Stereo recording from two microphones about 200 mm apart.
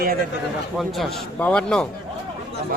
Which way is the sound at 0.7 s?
Centre (ahead or behind).